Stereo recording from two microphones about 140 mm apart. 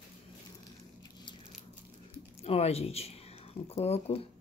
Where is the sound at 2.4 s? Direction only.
45° left (ahead or behind).